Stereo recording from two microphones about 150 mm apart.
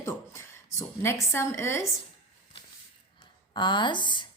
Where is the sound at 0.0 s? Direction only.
20° left (ahead or behind).